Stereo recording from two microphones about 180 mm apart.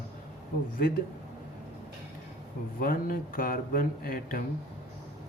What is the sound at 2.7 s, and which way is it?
Speech, 50° left (ahead or behind).